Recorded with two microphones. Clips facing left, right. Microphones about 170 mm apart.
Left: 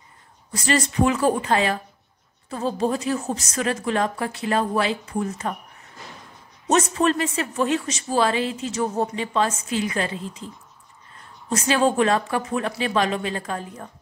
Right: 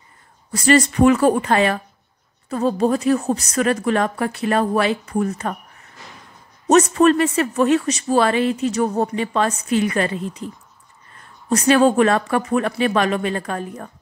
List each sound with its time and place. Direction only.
0.5 s speech: 65° right (ahead or behind)
6.7 s speech: 60° right (ahead or behind)
11.5 s speech: 65° right (ahead or behind)